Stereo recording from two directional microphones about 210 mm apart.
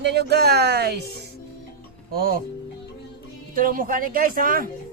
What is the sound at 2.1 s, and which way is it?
Speech, 45° right (ahead or behind).